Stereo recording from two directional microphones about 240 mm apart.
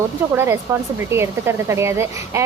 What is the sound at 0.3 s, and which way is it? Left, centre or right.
Speech, centre.